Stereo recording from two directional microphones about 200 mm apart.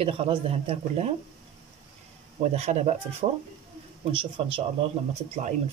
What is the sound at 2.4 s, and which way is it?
Speech, 35° right (ahead or behind).